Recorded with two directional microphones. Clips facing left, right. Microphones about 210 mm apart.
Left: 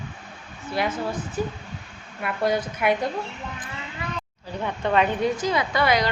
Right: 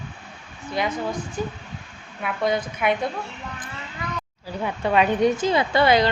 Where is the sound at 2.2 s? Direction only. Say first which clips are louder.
Even; 5° left (ahead or behind).